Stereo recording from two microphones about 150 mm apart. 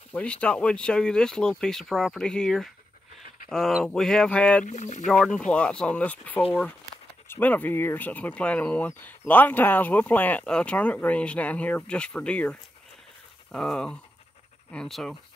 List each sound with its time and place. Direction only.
0.1 s speech: 10° left (ahead or behind)
4.6 s speech: 50° left (ahead or behind)
5.0 s speech: 5° left (ahead or behind)